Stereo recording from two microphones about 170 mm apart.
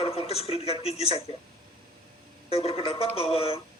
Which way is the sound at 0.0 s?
35° left (ahead or behind).